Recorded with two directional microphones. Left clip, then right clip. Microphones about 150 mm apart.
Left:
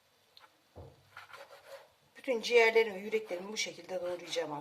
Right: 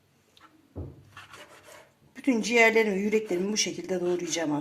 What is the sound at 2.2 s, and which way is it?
Speech, 35° right (ahead or behind).